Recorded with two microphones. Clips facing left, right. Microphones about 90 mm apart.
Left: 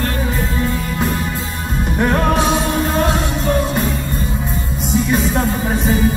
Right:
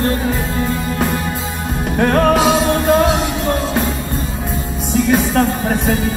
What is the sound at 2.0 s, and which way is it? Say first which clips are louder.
Music: right 3 dB; 50° right (ahead or behind).